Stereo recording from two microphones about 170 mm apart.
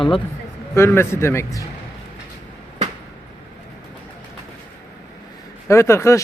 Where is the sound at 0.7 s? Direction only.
15° left (ahead or behind).